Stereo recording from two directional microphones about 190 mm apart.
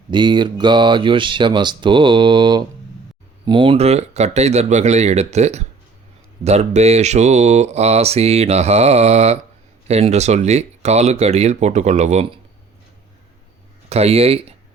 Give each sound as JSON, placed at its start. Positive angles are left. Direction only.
{"t": 0.1, "sound": "speech", "side_deg": -25}
{"t": 13.9, "sound": "speech", "side_deg": -30}